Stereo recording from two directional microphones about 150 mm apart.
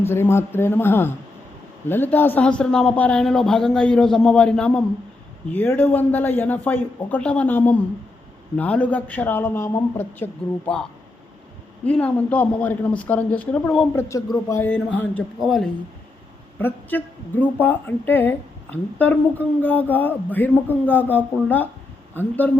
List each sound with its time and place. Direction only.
0.0 s a woman's voice: 15° left (ahead or behind)
11.9 s a woman's voice: 10° left (ahead or behind)
14.1 s speech: 20° left (ahead or behind)
14.5 s a woman's voice: 10° left (ahead or behind)
16.6 s a woman's voice: 15° left (ahead or behind)